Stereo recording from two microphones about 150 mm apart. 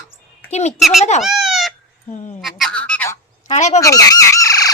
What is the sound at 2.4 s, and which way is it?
Fowl, centre (ahead or behind).